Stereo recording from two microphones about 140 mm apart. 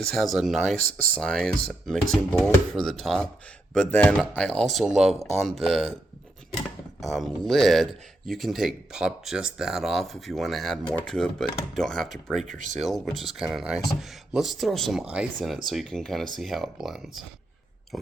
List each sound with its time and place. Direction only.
0.1 s speech: centre (ahead or behind)
7.0 s speech: centre (ahead or behind)
12.5 s speech: 65° right (ahead or behind)
12.8 s speech: centre (ahead or behind)